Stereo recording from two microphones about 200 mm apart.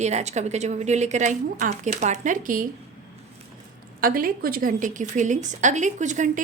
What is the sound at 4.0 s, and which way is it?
A woman's voice, 45° right (ahead or behind).